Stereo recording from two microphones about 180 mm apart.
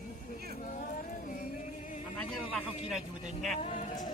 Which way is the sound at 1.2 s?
50° left (ahead or behind).